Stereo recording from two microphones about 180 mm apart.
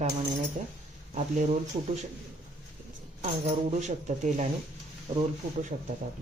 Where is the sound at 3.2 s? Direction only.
40° right (ahead or behind).